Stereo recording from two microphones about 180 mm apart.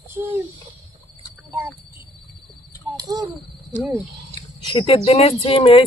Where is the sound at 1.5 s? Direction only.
10° right (ahead or behind).